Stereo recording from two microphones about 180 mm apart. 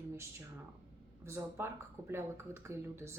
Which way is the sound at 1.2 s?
15° right (ahead or behind).